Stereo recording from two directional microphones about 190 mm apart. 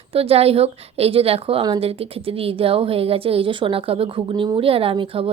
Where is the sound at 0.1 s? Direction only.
30° right (ahead or behind).